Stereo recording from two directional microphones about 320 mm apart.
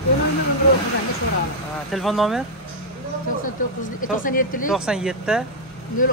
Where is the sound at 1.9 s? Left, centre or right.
Centre.